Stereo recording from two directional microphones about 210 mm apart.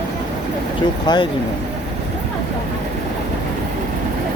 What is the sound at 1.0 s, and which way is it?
Speech, 20° left (ahead or behind).